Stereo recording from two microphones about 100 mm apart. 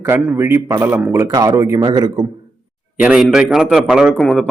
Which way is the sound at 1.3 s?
40° right (ahead or behind).